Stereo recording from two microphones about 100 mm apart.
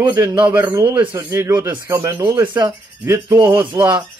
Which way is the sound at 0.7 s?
50° right (ahead or behind).